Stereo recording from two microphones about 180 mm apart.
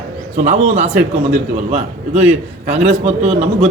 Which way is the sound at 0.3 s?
40° right (ahead or behind).